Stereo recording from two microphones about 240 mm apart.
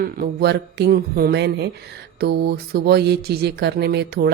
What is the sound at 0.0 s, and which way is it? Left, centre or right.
Mantra, right.